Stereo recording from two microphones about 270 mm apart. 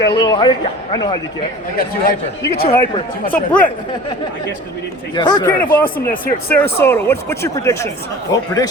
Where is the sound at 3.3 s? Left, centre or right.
Centre.